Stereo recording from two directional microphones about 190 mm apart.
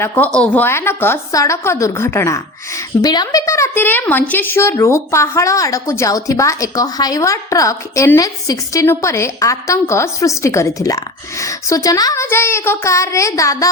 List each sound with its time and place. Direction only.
0.0 s a woman's voice: 10° left (ahead or behind)